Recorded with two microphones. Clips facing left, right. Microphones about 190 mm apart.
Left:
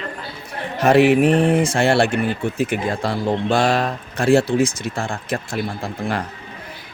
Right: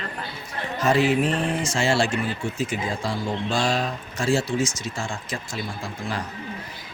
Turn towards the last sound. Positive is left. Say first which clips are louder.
# left 6 dB
turn(degrees=60)  # may be behind; listen again after turning